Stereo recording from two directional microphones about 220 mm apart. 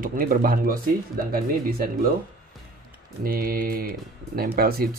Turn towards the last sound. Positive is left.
turn(degrees=-45)  # may be behind; listen again after turning